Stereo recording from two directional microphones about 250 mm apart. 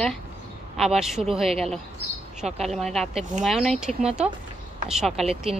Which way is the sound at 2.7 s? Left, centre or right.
Centre.